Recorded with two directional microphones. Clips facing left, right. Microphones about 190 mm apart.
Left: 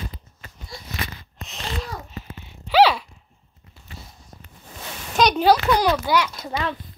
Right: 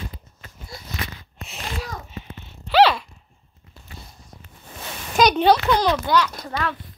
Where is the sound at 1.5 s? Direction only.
5° right (ahead or behind).